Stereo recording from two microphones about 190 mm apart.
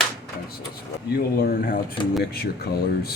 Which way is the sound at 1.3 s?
50° left (ahead or behind).